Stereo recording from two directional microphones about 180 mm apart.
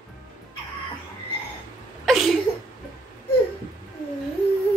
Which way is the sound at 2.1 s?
Centre (ahead or behind).